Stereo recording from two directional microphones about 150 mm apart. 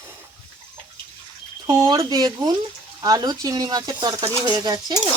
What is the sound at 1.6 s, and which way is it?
Speech, 25° right (ahead or behind).